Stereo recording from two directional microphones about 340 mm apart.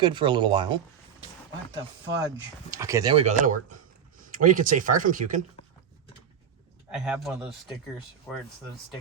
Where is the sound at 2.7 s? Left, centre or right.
Centre.